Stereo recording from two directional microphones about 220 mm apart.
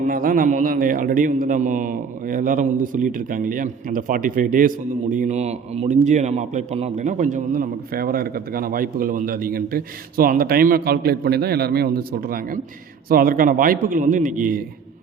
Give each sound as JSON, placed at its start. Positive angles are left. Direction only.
{"t": 0.0, "sound": "a man's voice", "side_deg": -40}